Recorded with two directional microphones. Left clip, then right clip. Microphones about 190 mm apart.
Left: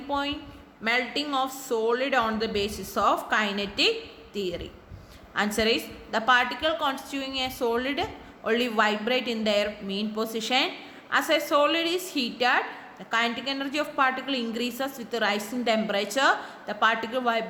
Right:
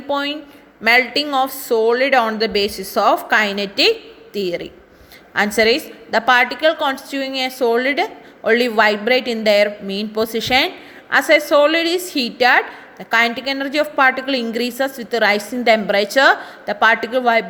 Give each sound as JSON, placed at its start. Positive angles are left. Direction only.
{"t": 0.1, "sound": "a woman's voice", "side_deg": -30}